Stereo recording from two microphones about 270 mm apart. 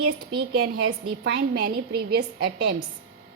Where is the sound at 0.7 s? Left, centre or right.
Right.